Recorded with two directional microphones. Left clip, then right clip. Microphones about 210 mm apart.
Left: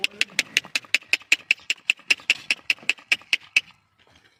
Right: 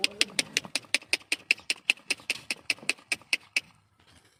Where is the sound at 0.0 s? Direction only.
5° right (ahead or behind).